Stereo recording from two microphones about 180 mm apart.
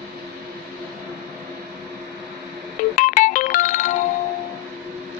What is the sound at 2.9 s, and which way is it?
Music, 45° left (ahead or behind).